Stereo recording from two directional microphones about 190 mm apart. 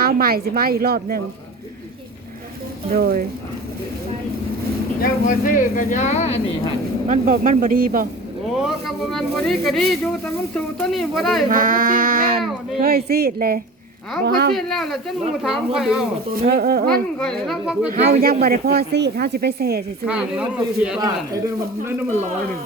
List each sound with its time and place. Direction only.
0.0 s a woman's voice: 50° right (ahead or behind)
2.9 s a woman's voice: 50° right (ahead or behind)
5.0 s speech: 45° left (ahead or behind)
7.1 s a woman's voice: 45° right (ahead or behind)
9.1 s speech: centre (ahead or behind)
11.4 s a woman's voice: 45° right (ahead or behind)
14.5 s speech: centre (ahead or behind)
16.4 s a woman's voice: 55° right (ahead or behind)
17.2 s speech: centre (ahead or behind)
18.2 s speech: 55° right (ahead or behind)
20.1 s speech: 5° right (ahead or behind)
21.0 s speech: 15° right (ahead or behind)